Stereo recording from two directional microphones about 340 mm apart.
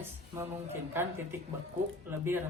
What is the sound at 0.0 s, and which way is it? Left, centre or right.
Speech, centre.